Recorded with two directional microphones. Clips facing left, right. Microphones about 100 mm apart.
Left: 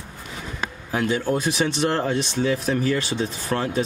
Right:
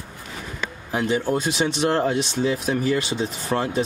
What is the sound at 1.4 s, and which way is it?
Speech, 15° right (ahead or behind).